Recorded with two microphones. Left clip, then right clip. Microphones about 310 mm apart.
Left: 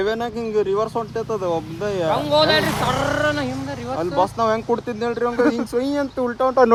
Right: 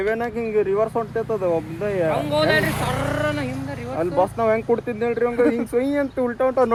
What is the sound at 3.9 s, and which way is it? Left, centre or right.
Speech, centre.